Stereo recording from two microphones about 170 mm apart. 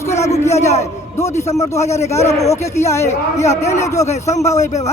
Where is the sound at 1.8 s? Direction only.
15° left (ahead or behind).